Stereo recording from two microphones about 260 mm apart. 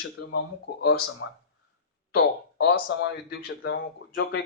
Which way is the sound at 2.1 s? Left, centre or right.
Left.